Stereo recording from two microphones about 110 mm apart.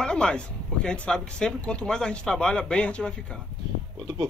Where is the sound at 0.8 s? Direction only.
10° left (ahead or behind).